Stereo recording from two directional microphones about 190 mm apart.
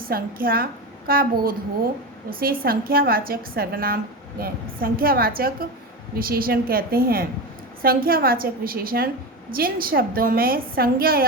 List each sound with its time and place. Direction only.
0.1 s a woman's voice: 50° right (ahead or behind)